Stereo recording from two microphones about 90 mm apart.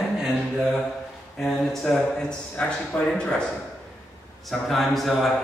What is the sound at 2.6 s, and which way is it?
Speech, 15° left (ahead or behind).